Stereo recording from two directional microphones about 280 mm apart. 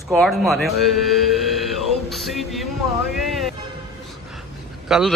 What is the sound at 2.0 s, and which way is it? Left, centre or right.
Music, centre.